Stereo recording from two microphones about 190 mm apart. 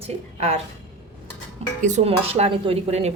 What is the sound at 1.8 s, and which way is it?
Speech, 40° right (ahead or behind).